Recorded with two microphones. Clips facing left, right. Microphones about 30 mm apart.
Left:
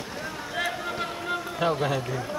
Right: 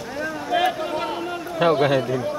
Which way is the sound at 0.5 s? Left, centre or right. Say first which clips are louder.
Right 9 dB; right.